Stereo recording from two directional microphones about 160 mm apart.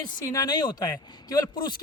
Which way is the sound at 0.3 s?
25° left (ahead or behind).